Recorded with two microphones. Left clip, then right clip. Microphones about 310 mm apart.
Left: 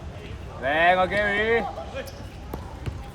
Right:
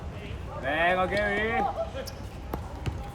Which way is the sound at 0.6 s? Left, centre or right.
Left.